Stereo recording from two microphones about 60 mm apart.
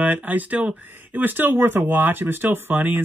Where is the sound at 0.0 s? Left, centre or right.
Right.